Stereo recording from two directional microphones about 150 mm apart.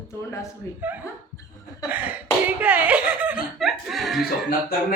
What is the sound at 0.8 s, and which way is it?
Speech, 10° right (ahead or behind).